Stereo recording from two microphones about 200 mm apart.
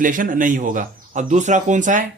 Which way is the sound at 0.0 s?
40° right (ahead or behind).